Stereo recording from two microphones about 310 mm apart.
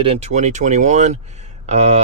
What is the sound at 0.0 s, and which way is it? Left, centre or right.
Speech, centre.